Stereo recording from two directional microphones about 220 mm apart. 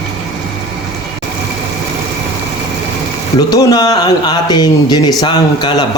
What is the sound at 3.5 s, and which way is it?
Speech, 15° left (ahead or behind).